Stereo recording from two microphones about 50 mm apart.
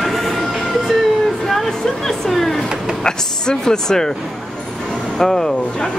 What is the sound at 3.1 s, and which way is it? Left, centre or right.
Speech, centre.